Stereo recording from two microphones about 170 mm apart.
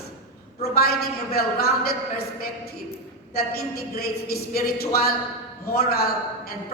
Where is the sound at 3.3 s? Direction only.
65° left (ahead or behind).